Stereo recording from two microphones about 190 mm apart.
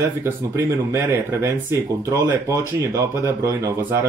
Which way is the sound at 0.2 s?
15° right (ahead or behind).